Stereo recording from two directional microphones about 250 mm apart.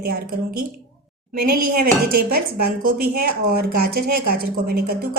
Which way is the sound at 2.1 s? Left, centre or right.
Right.